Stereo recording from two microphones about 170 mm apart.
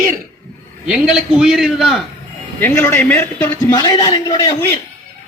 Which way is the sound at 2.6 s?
10° left (ahead or behind).